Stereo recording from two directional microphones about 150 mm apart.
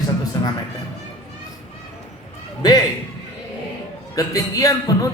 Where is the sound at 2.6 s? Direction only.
25° left (ahead or behind).